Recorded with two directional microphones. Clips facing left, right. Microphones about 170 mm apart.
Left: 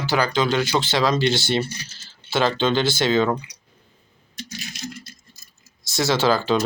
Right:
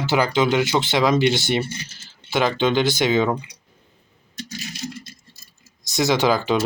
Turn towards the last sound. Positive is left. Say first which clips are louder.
# even
turn(degrees=-15)  # may be behind; listen again after turning